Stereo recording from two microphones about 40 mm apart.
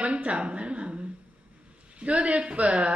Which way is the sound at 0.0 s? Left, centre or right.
Right.